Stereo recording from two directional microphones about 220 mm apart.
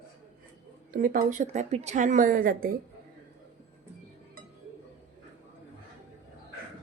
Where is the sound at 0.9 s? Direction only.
35° right (ahead or behind).